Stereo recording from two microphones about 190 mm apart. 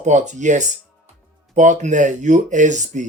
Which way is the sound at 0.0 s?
40° right (ahead or behind).